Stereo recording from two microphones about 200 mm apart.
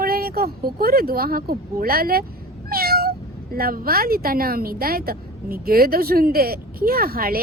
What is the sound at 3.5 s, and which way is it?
A woman's voice, 45° right (ahead or behind).